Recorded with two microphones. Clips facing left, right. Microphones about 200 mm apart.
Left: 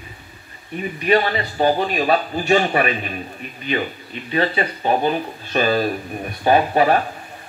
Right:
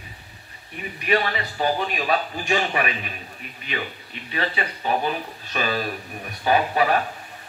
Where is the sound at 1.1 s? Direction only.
35° left (ahead or behind).